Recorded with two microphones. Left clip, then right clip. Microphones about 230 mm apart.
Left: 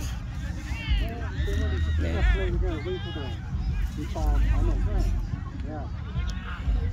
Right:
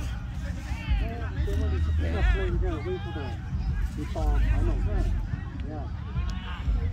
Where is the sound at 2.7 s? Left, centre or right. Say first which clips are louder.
Even; left.